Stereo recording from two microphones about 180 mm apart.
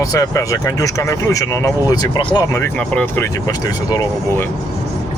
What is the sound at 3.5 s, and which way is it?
Speech, 20° left (ahead or behind).